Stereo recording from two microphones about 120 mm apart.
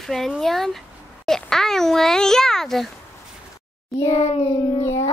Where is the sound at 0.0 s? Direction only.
Centre (ahead or behind).